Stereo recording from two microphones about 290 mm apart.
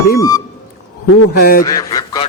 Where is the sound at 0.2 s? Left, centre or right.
Centre.